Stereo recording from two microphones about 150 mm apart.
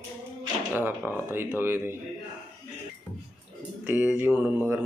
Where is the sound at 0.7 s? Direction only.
15° right (ahead or behind).